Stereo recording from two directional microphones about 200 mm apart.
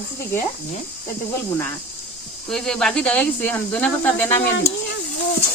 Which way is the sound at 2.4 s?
5° left (ahead or behind).